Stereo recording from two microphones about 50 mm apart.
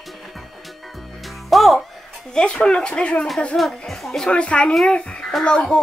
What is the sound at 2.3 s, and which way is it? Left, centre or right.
Speech, centre.